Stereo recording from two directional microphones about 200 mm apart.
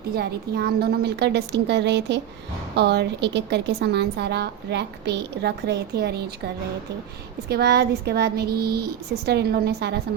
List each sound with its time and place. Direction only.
0.2 s a woman's voice: 55° right (ahead or behind)